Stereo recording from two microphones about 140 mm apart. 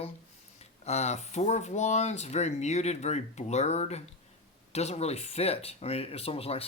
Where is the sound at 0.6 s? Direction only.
50° left (ahead or behind).